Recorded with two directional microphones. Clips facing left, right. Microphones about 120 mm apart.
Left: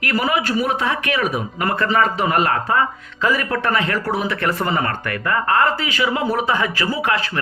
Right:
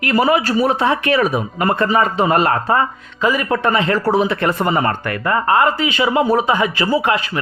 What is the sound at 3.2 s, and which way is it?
Speech, 15° right (ahead or behind).